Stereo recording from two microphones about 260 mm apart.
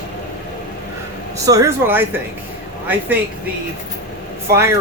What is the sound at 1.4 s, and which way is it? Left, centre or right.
Speech, centre.